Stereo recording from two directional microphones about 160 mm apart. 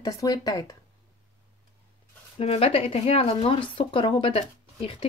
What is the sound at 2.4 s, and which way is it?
Speech, 40° left (ahead or behind).